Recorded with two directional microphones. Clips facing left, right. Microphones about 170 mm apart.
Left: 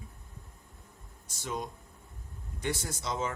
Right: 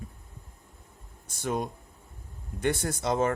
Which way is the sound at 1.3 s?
55° right (ahead or behind).